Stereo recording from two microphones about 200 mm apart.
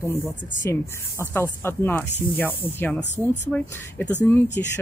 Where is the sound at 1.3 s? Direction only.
10° left (ahead or behind).